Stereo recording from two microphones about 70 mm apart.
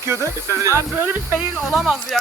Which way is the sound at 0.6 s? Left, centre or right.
Right.